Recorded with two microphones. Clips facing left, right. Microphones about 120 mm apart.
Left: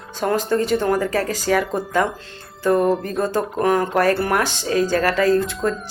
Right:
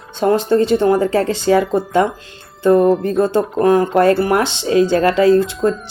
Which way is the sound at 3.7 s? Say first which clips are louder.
Right 6 dB; 20° right (ahead or behind).